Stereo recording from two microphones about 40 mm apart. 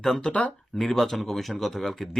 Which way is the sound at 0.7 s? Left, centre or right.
Centre.